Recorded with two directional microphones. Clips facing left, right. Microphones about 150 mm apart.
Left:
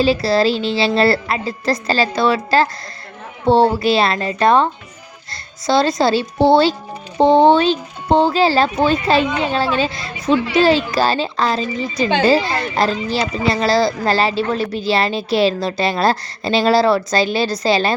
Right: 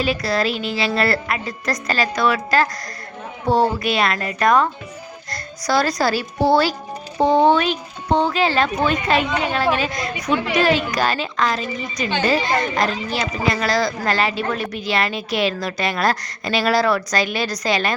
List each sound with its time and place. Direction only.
0.0 s speech: 30° left (ahead or behind)